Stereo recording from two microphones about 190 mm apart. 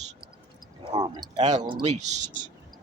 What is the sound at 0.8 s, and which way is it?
Speech, 25° right (ahead or behind).